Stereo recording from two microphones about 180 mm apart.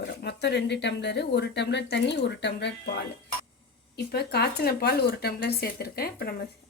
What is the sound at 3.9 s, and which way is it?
Speech, 60° left (ahead or behind).